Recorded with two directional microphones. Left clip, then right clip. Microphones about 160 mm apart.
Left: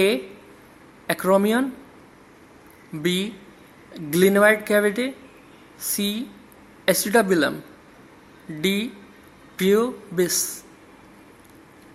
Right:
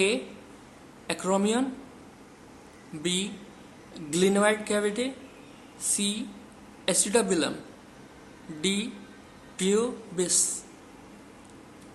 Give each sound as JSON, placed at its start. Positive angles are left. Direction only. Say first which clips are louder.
{"t": 1.0, "sound": "speech", "louder": "left 8 dB", "side_deg": 35}
{"t": 3.0, "sound": "speech", "louder": "left 5 dB", "side_deg": 35}
{"t": 8.6, "sound": "speech", "louder": "left 5 dB", "side_deg": 35}